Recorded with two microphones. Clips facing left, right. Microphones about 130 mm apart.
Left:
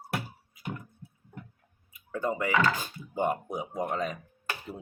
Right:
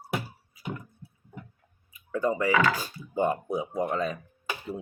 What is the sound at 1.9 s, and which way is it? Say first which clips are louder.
Clicking: right 4 dB; 20° left (ahead or behind).